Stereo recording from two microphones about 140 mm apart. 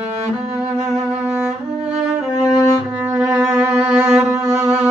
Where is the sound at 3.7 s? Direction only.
10° right (ahead or behind).